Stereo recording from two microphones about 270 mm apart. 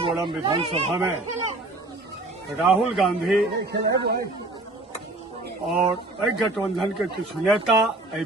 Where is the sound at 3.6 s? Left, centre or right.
Right.